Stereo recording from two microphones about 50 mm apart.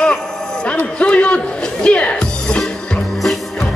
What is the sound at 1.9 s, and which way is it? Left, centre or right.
Music, left.